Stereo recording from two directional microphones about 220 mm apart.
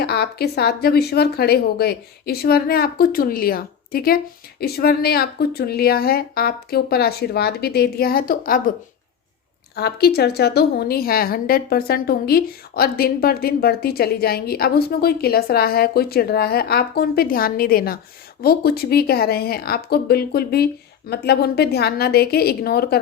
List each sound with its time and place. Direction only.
0.0 s a woman's voice: 45° left (ahead or behind)
9.7 s a woman's voice: 45° left (ahead or behind)